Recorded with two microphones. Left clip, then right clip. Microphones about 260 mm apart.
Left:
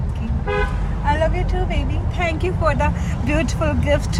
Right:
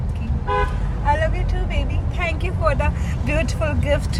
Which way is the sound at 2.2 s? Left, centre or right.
Centre.